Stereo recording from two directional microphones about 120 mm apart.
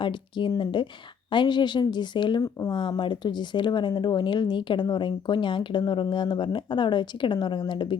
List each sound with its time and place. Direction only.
0.0 s speech: 40° left (ahead or behind)
2.4 s speech: 30° left (ahead or behind)
2.7 s speech: 40° left (ahead or behind)